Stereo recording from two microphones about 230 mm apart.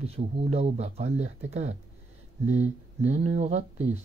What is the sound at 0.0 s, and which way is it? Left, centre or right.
Speech, right.